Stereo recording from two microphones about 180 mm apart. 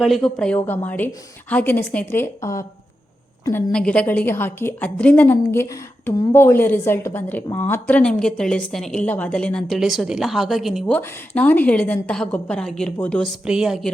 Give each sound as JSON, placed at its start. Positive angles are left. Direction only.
{"t": 0.0, "sound": "a woman's voice", "side_deg": 0}